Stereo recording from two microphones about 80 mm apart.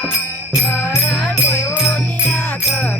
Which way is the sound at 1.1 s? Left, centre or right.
Left.